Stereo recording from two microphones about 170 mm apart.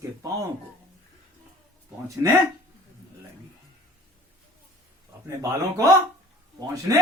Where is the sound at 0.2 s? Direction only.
20° right (ahead or behind).